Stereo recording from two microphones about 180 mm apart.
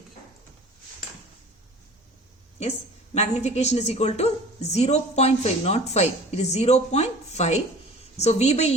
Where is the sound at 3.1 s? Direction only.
40° left (ahead or behind).